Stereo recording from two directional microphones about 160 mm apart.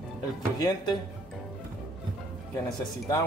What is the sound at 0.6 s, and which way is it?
Speech, 25° left (ahead or behind).